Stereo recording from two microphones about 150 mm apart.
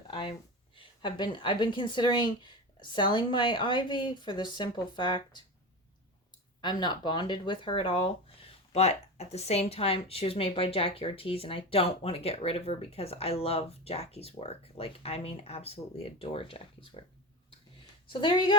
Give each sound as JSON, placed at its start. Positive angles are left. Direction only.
{"t": 0.1, "sound": "speech", "side_deg": 35}
{"t": 6.6, "sound": "speech", "side_deg": 30}
{"t": 18.1, "sound": "speech", "side_deg": 30}